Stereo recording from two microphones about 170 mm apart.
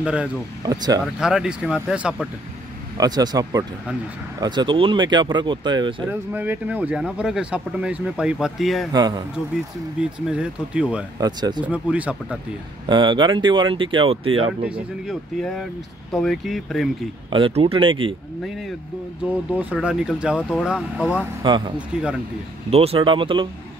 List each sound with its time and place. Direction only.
0.0 s speech: 5° right (ahead or behind)
0.7 s speech: 25° right (ahead or behind)
1.0 s speech: 5° right (ahead or behind)
3.0 s speech: 25° right (ahead or behind)
6.3 s speech: 10° right (ahead or behind)
9.9 s speech: 5° right (ahead or behind)
11.1 s speech: 25° right (ahead or behind)
11.6 s speech: 10° right (ahead or behind)
12.8 s speech: 30° right (ahead or behind)
14.6 s speech: 5° right (ahead or behind)
17.3 s speech: 35° right (ahead or behind)
19.2 s speech: 10° right (ahead or behind)
21.4 s speech: 25° right (ahead or behind)
22.7 s speech: 35° right (ahead or behind)